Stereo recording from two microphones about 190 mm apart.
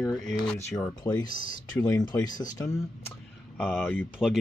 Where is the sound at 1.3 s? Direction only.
45° left (ahead or behind).